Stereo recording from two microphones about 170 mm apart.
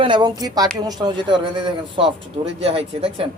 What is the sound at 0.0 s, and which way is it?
A man's voice, 25° right (ahead or behind).